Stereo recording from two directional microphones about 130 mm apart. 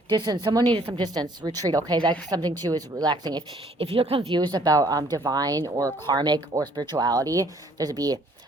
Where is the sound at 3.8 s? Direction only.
45° right (ahead or behind).